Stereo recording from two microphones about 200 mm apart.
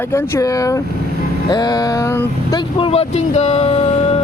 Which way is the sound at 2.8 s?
30° left (ahead or behind).